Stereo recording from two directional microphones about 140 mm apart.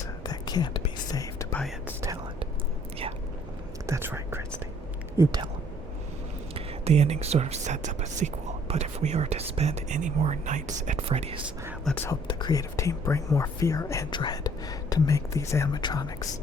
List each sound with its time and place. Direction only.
0.3 s whispering: 30° left (ahead or behind)
3.8 s whispering: 20° right (ahead or behind)
5.1 s speech: 20° right (ahead or behind)
6.5 s speech: 50° right (ahead or behind)
11.9 s speech: 5° left (ahead or behind)
12.3 s speech: 30° left (ahead or behind)